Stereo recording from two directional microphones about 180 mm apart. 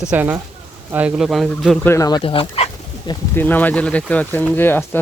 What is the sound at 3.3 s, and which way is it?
Speech, 10° left (ahead or behind).